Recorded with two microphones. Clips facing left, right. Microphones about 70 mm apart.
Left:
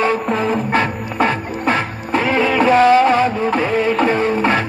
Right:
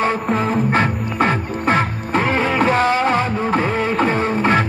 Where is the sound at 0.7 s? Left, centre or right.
Right.